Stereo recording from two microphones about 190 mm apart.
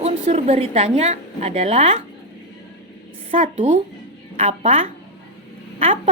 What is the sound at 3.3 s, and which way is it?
A woman's voice, 40° right (ahead or behind).